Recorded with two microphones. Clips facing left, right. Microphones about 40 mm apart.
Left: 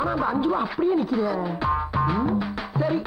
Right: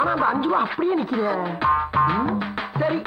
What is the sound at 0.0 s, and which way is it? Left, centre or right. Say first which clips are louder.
A man's voice: right 3 dB; right.